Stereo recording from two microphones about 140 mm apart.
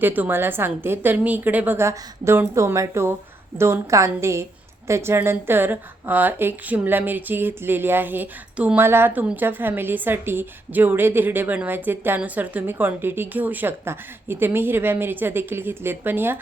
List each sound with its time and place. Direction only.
0.0 s a woman's voice: 15° right (ahead or behind)